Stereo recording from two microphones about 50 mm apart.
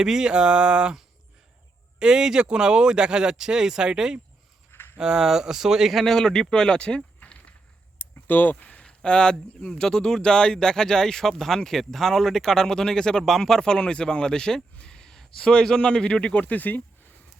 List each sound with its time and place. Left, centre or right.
0.0 s speech: centre
2.0 s speech: centre
4.7 s a sound: left
4.9 s a man's voice: centre
6.1 s speech: centre
7.9 s a sound: left
9.0 s speech: centre; by 16.8 s left